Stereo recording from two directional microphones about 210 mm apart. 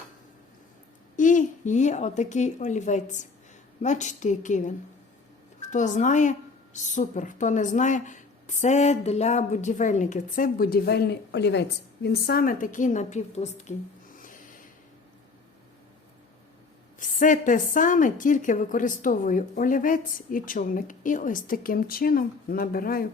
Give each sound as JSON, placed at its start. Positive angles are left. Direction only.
{"t": 1.1, "sound": "a woman's voice", "side_deg": 35}
{"t": 5.7, "sound": "a woman's voice", "side_deg": 35}
{"t": 17.0, "sound": "a woman's voice", "side_deg": 40}